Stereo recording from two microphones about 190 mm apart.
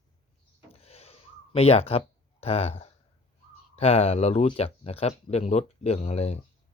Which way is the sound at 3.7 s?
35° left (ahead or behind).